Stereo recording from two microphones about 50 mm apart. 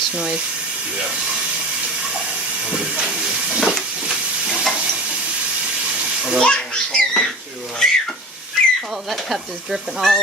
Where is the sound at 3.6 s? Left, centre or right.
Centre.